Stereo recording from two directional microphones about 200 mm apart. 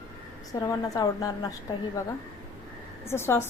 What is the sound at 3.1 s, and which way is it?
Speech, 10° left (ahead or behind).